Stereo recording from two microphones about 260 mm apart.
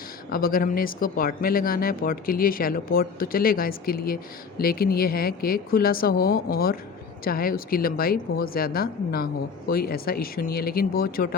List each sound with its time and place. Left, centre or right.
0.3 s speech: left